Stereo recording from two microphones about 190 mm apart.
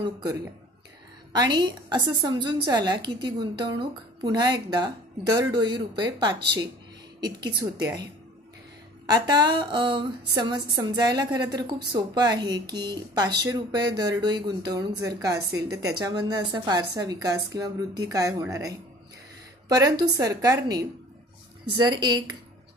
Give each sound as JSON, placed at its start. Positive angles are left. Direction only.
{"t": 0.0, "sound": "a woman's voice", "side_deg": -20}
{"t": 21.8, "sound": "a woman's voice", "side_deg": -25}